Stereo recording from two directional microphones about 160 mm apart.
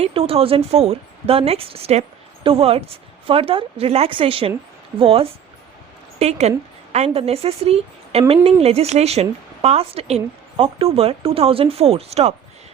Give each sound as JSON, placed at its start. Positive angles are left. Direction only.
{"t": 0.0, "sound": "a woman's voice", "side_deg": -35}